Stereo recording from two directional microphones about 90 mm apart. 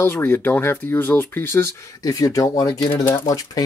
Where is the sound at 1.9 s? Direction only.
40° left (ahead or behind).